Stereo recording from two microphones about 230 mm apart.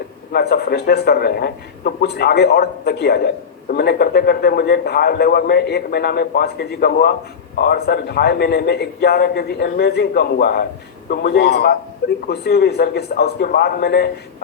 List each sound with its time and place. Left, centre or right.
0.3 s speech: left